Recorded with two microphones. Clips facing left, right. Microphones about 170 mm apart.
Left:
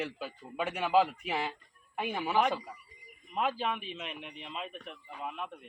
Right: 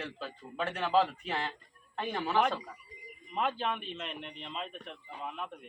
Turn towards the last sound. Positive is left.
turn(degrees=0)  # may be behind; listen again after turning